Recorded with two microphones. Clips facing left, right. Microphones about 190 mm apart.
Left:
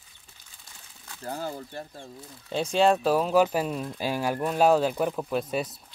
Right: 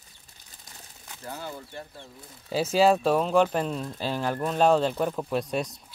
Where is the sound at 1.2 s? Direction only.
40° left (ahead or behind).